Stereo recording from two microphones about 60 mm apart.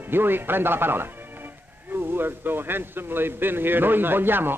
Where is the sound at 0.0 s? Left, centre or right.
Right.